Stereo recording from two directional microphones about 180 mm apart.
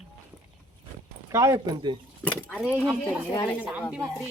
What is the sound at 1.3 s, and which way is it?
Speech, 15° right (ahead or behind).